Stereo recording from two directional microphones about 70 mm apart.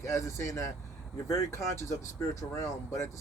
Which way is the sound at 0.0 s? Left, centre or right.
Left.